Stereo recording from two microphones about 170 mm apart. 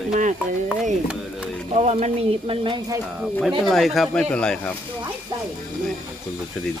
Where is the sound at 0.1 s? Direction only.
45° right (ahead or behind).